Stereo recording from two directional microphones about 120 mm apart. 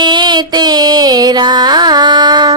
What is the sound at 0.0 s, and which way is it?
Music, 40° right (ahead or behind).